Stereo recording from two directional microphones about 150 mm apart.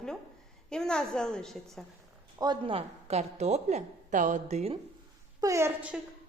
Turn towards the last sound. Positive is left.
turn(degrees=-15)  # may be behind; listen again after turning